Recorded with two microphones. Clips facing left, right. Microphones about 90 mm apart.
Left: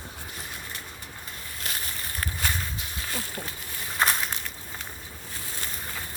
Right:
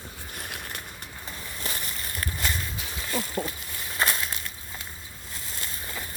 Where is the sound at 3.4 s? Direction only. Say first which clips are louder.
Right 7 dB; 55° right (ahead or behind).